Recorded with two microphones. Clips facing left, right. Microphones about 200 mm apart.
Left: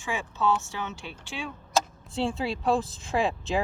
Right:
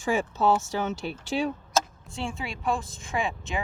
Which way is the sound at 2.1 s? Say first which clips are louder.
Left 6 dB; 35° left (ahead or behind).